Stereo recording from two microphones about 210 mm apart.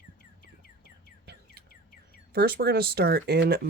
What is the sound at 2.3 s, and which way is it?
Speech, 50° right (ahead or behind).